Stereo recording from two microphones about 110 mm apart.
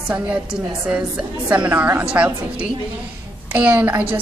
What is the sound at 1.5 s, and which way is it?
A woman's voice, 10° right (ahead or behind).